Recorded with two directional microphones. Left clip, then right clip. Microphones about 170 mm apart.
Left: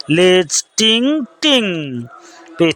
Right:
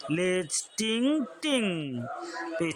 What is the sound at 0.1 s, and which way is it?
A woman's voice, 50° left (ahead or behind).